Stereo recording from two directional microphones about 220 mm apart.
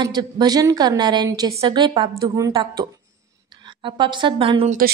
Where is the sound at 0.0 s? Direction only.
20° right (ahead or behind).